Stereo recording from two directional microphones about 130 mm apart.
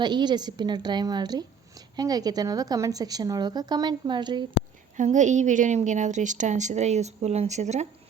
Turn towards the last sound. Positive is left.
turn(degrees=-60)  # may be behind; listen again after turning